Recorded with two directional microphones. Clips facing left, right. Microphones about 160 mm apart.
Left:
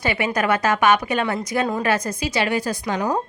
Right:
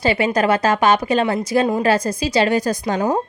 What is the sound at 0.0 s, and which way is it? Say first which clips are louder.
A woman's voice: right 5 dB; 30° right (ahead or behind).